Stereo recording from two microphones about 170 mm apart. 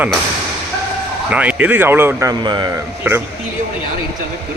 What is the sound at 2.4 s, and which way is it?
Speech, 25° right (ahead or behind).